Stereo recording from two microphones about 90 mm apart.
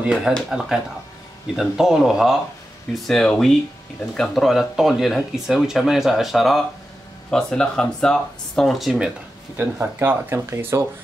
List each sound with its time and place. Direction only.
0.0 s speech: 15° right (ahead or behind)
9.6 s speech: 20° right (ahead or behind)